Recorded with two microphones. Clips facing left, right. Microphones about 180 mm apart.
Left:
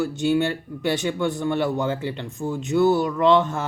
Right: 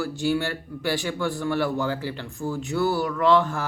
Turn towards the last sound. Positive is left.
turn(degrees=20)  # may be behind; listen again after turning